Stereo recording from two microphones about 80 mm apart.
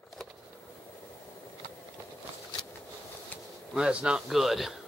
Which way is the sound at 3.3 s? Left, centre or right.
Left.